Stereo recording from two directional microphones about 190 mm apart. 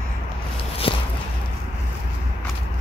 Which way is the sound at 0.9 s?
25° left (ahead or behind).